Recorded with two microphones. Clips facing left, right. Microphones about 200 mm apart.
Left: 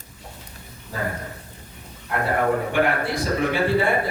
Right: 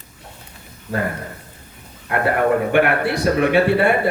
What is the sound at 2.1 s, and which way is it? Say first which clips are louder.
A man's voice: right 4 dB; 65° right (ahead or behind).